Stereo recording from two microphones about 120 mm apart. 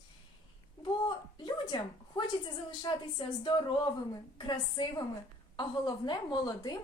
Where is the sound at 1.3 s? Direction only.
40° left (ahead or behind).